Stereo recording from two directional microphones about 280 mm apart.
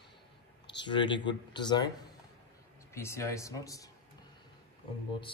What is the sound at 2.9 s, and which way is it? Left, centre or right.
Speech, centre.